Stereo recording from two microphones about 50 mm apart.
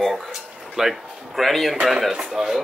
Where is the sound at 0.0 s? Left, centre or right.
Centre.